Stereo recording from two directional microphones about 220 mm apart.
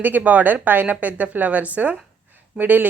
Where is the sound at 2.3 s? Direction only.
10° right (ahead or behind).